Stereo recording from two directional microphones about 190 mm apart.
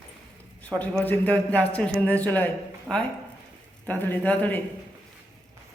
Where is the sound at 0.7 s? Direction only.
10° left (ahead or behind).